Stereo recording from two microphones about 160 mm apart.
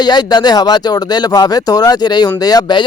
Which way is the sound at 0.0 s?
25° left (ahead or behind).